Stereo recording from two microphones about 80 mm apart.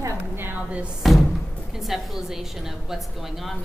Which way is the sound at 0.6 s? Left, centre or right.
Centre.